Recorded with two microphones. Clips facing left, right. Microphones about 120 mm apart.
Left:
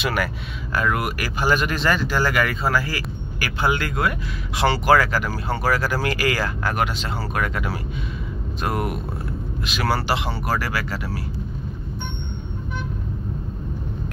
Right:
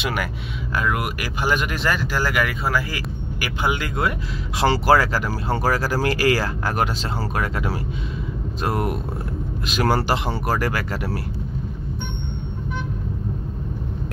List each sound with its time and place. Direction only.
0.0 s speech: 15° right (ahead or behind)
4.6 s speech: 30° right (ahead or behind); by 11.0 s 50° right (ahead or behind)